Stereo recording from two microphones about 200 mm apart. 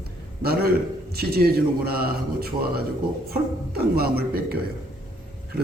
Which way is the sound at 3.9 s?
50° right (ahead or behind).